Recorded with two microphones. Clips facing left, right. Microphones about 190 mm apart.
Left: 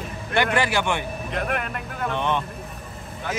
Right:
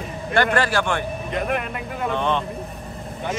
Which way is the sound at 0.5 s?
15° left (ahead or behind).